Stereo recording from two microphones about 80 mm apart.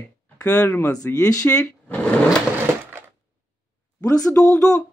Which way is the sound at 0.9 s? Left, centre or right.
Left.